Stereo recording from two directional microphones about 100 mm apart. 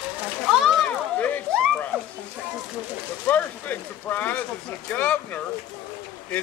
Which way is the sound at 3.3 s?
15° left (ahead or behind).